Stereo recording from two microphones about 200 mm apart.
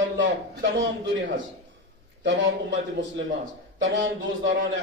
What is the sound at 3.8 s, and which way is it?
Speech, 70° right (ahead or behind).